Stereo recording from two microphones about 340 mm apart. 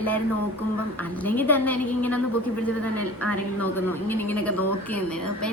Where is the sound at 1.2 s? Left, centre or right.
Centre.